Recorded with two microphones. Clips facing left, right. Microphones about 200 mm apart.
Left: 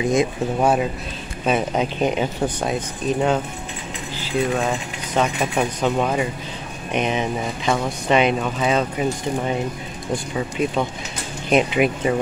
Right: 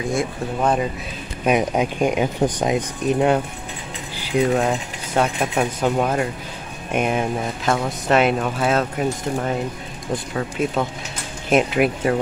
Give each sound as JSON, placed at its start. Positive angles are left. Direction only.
{"t": 0.1, "sound": "speech", "side_deg": 20}
{"t": 1.4, "sound": "speech", "side_deg": -10}